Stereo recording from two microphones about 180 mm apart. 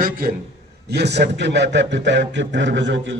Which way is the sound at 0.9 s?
65° right (ahead or behind).